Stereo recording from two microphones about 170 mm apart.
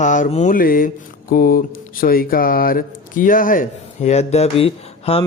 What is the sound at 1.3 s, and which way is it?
Speech, 60° left (ahead or behind).